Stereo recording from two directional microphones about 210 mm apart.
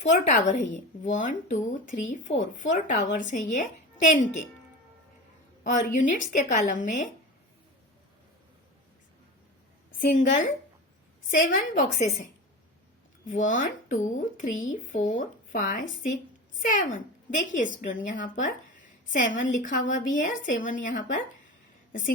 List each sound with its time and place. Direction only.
0.0 s speech: 35° left (ahead or behind)
5.6 s speech: 35° left (ahead or behind)
10.0 s speech: 40° left (ahead or behind)
13.5 s a woman's voice: 35° left (ahead or behind)